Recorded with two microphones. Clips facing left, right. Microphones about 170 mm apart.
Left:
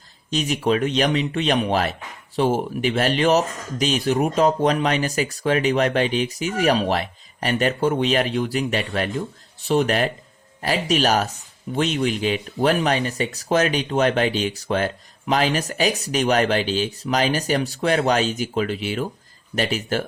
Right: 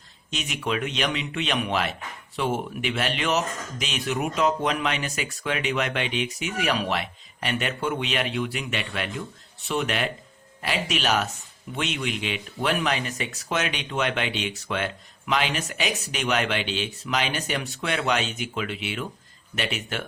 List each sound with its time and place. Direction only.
0.3 s speech: 35° left (ahead or behind)